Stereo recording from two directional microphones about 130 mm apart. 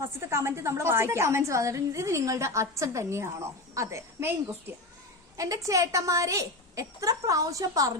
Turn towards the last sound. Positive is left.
turn(degrees=-25)  # may be behind; listen again after turning